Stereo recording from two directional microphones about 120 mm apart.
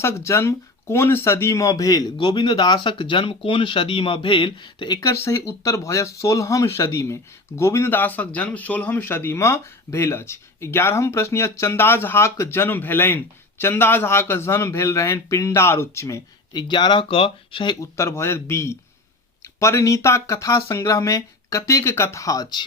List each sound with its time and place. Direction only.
0.0 s speech: 25° left (ahead or behind)
2.1 s speech: 40° left (ahead or behind)
5.0 s speech: 20° left (ahead or behind)
16.5 s speech: 35° left (ahead or behind)
17.7 s speech: 25° left (ahead or behind)